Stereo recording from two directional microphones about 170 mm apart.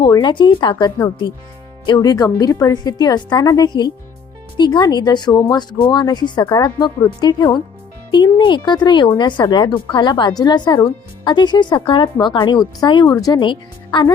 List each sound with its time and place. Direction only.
0.1 s speech: 25° left (ahead or behind)